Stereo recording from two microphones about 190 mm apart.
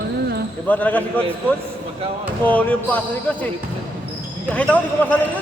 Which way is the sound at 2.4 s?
10° left (ahead or behind).